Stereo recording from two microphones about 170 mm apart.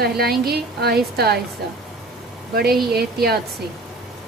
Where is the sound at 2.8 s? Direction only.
65° right (ahead or behind).